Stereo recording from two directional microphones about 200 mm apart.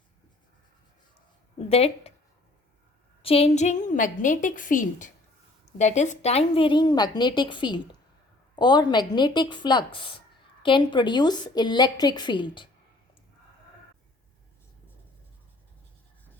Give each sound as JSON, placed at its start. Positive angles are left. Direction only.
{"t": 1.5, "sound": "speech", "side_deg": 30}
{"t": 3.2, "sound": "a woman's voice", "side_deg": 30}